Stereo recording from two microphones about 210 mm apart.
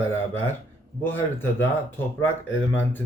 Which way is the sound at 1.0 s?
10° left (ahead or behind).